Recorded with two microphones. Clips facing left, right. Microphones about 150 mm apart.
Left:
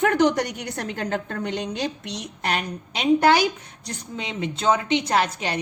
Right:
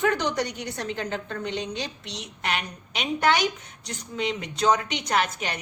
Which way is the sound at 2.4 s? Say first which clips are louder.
Left 3 dB; 35° left (ahead or behind).